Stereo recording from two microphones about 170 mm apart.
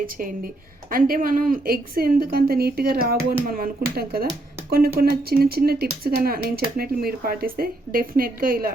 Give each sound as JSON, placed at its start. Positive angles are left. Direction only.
{"t": 0.9, "sound": "speech", "side_deg": -55}